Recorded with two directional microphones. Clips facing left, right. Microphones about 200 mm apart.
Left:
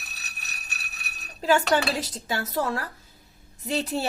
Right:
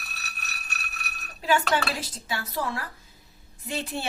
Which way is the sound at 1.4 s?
40° left (ahead or behind).